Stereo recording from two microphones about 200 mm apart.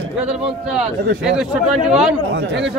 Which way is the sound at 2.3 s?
55° right (ahead or behind).